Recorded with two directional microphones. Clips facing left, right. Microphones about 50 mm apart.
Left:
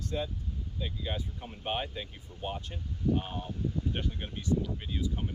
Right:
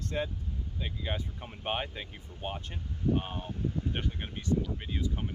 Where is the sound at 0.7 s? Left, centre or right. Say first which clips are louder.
Even; right.